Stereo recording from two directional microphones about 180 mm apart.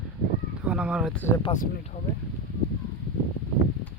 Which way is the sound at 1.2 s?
15° left (ahead or behind).